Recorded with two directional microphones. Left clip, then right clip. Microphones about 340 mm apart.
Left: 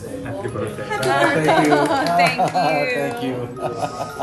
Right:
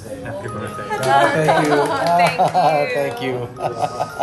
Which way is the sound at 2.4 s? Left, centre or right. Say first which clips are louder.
Right 3 dB; centre.